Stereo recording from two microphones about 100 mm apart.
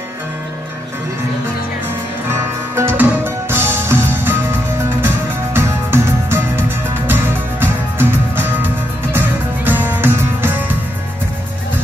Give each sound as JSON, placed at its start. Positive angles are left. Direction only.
{"t": 2.2, "sound": "music", "side_deg": -25}
{"t": 9.7, "sound": "music", "side_deg": -20}